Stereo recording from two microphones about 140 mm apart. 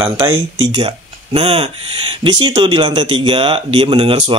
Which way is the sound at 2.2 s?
35° right (ahead or behind).